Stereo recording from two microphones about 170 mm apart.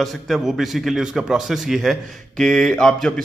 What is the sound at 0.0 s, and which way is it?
A man's voice, centre (ahead or behind).